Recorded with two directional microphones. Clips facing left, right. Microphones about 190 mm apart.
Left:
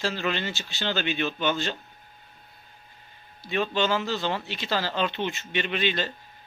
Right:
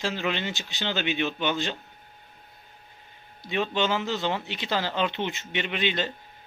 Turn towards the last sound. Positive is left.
turn(degrees=-20)  # may be behind; listen again after turning